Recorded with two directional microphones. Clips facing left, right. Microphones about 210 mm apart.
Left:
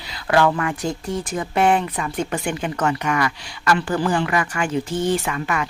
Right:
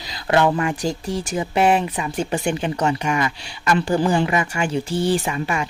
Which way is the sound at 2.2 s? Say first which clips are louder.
Right 2 dB; 25° right (ahead or behind).